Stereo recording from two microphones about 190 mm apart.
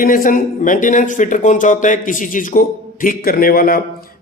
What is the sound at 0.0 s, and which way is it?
A man's voice, 45° left (ahead or behind).